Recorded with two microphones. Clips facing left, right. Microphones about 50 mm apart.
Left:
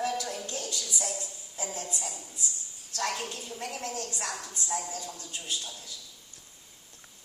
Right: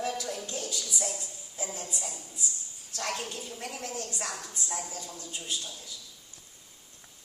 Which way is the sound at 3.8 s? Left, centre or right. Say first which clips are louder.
Left 1 dB; centre.